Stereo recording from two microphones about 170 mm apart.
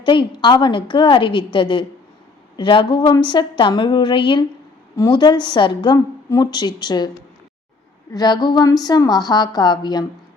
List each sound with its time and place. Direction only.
0.0 s a woman's voice: 30° left (ahead or behind)
8.1 s a woman's voice: 25° left (ahead or behind)